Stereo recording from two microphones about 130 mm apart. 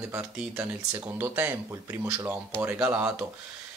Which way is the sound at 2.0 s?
25° right (ahead or behind).